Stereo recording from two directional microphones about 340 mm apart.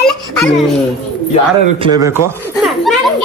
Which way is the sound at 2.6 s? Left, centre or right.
Centre.